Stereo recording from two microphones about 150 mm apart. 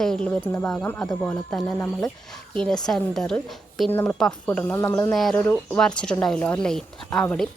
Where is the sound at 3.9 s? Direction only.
15° left (ahead or behind).